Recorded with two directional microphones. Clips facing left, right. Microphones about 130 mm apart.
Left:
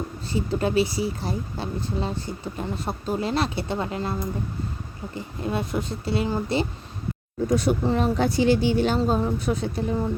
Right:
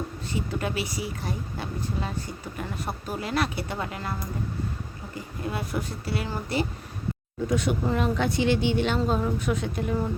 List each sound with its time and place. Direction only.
0.3 s speech: 30° left (ahead or behind)
5.1 s speech: 25° left (ahead or behind)
7.5 s speech: 35° left (ahead or behind)